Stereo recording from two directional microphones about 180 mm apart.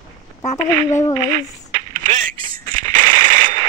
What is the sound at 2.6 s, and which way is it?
Machine gun, 45° right (ahead or behind).